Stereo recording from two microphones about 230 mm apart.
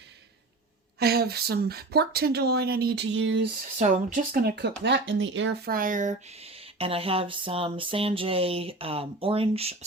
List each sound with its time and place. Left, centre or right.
0.9 s speech: right
3.8 s speech: right